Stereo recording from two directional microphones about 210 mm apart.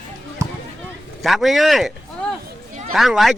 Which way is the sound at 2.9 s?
Centre (ahead or behind).